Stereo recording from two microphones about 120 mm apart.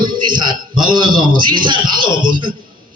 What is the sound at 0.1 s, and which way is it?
A man's voice, 40° right (ahead or behind).